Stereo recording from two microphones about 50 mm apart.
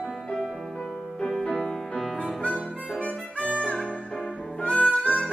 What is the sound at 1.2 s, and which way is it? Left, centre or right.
Music, centre.